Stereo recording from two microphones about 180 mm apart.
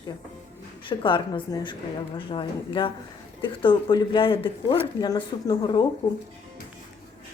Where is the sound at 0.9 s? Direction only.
25° left (ahead or behind).